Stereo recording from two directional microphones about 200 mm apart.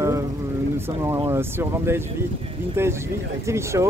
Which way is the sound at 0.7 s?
10° right (ahead or behind).